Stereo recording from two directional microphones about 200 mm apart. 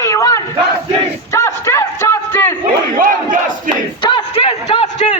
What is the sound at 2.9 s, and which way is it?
Battle cry, 45° right (ahead or behind).